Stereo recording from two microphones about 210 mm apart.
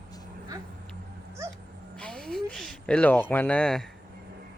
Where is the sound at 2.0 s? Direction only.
5° left (ahead or behind).